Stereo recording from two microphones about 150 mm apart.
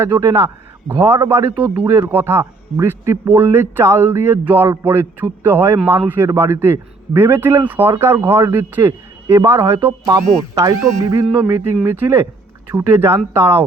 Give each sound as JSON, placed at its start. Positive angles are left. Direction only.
{"t": 0.0, "sound": "a man's voice", "side_deg": -20}